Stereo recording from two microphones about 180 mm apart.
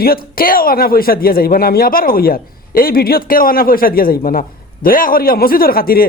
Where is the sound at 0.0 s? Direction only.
55° left (ahead or behind).